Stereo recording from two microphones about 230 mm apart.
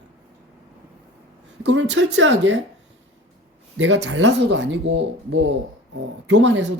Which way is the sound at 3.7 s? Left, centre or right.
Right.